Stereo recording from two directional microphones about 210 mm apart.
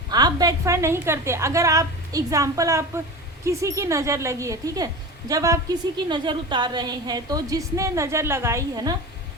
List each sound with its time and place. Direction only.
0.1 s a woman's voice: 20° right (ahead or behind)